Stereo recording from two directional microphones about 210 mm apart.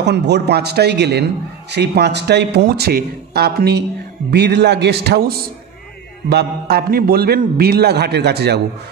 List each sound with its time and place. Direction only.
0.0 s a man's voice: 55° right (ahead or behind)